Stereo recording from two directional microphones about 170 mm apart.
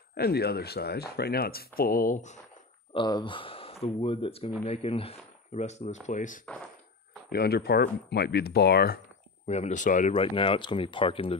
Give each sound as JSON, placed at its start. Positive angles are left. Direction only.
{"t": 0.1, "sound": "speech", "side_deg": 70}
{"t": 2.9, "sound": "speech", "side_deg": 25}
{"t": 7.2, "sound": "speech", "side_deg": 70}
{"t": 9.5, "sound": "speech", "side_deg": 40}
{"t": 10.1, "sound": "speech", "side_deg": 30}